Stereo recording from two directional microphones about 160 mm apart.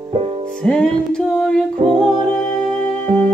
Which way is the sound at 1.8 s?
35° right (ahead or behind).